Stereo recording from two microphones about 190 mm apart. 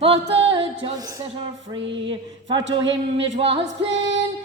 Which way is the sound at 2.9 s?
75° right (ahead or behind).